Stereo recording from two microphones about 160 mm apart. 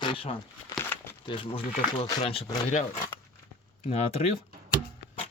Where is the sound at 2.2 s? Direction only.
40° left (ahead or behind).